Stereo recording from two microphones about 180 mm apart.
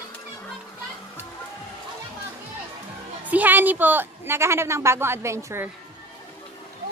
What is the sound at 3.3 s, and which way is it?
A woman's voice, 10° right (ahead or behind).